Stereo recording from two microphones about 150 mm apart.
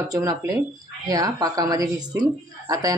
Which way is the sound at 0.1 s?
20° right (ahead or behind).